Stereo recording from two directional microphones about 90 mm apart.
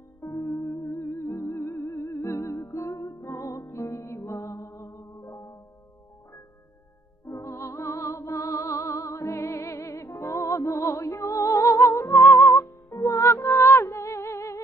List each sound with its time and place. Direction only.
0.2 s music: 35° left (ahead or behind)
7.2 s music: 30° left (ahead or behind)